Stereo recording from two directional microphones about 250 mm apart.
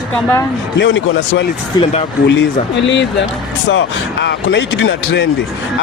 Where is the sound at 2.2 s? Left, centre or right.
Left.